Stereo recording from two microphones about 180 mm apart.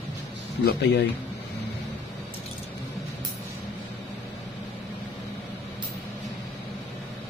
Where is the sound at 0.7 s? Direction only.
65° left (ahead or behind).